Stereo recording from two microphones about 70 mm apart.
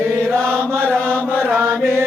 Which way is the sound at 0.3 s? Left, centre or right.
Right.